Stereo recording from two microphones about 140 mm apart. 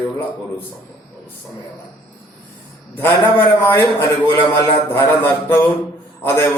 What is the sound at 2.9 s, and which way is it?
A man's voice, 15° left (ahead or behind).